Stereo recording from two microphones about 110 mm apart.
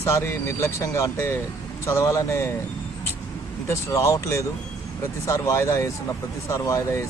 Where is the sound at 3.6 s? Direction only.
25° left (ahead or behind).